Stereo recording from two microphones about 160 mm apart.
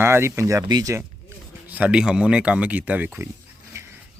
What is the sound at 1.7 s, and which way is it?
Speech, 5° right (ahead or behind).